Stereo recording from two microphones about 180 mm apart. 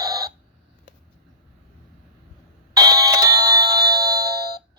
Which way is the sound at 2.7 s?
20° right (ahead or behind).